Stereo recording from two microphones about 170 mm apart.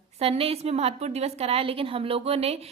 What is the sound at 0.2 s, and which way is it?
A woman's voice, 35° right (ahead or behind).